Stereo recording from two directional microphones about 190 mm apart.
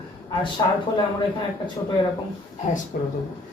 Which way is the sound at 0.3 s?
20° left (ahead or behind).